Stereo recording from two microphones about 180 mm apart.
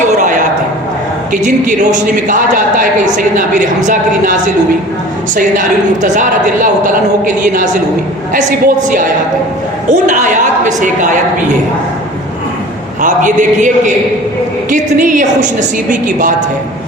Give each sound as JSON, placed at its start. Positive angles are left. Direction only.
{"t": 0.0, "sound": "a sound", "side_deg": -45}
{"t": 1.3, "sound": "a man's voice", "side_deg": -45}
{"t": 5.4, "sound": "a man's voice", "side_deg": -45}
{"t": 13.0, "sound": "a man's voice", "side_deg": -45}